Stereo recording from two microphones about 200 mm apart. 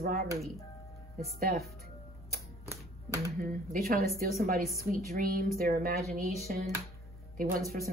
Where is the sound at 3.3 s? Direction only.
45° right (ahead or behind).